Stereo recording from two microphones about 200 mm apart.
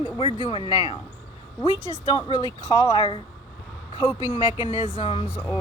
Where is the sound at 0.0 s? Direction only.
25° left (ahead or behind).